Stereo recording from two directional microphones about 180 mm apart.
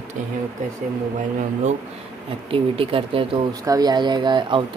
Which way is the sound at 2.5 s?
30° right (ahead or behind).